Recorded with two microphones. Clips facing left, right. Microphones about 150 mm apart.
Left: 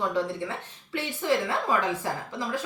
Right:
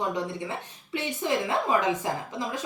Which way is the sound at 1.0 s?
20° right (ahead or behind).